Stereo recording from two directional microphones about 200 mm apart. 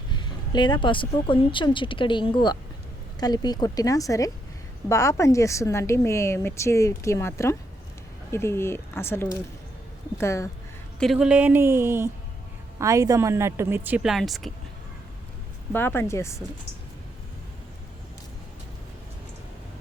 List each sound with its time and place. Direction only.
0.1 s a woman's voice: 20° left (ahead or behind)
11.0 s a woman's voice: centre (ahead or behind)
15.7 s speech: 10° left (ahead or behind)